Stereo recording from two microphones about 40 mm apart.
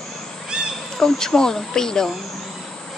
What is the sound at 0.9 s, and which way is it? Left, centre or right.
Speech, centre.